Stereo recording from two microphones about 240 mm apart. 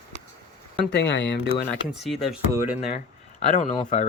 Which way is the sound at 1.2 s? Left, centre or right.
Left.